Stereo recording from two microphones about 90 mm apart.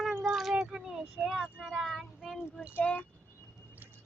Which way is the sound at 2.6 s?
15° right (ahead or behind).